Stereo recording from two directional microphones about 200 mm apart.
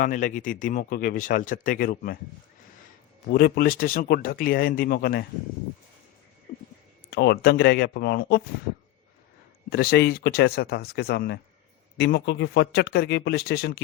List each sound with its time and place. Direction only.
0.0 s speech: 40° left (ahead or behind)
3.2 s speech: 50° left (ahead or behind)
6.5 s a sound: 45° left (ahead or behind)
7.1 s speech: 55° left (ahead or behind)
9.6 s speech: 50° left (ahead or behind)